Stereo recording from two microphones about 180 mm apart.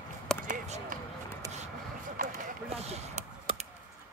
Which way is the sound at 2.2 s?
50° right (ahead or behind).